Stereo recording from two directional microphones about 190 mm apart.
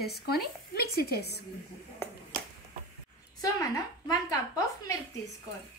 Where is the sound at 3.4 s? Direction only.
20° left (ahead or behind).